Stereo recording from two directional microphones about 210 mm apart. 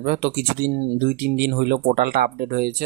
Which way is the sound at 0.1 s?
45° right (ahead or behind).